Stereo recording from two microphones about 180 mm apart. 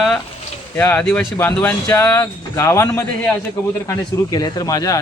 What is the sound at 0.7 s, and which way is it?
A man's voice, 10° left (ahead or behind).